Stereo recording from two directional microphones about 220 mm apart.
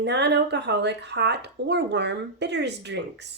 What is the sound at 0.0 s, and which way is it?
Speech, 50° right (ahead or behind).